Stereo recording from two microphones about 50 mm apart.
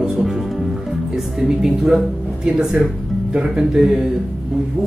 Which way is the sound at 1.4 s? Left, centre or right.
Centre.